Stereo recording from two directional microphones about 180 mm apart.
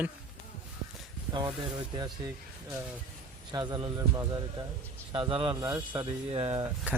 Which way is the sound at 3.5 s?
25° right (ahead or behind).